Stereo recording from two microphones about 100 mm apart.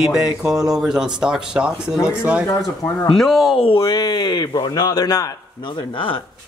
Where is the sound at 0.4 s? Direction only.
35° right (ahead or behind).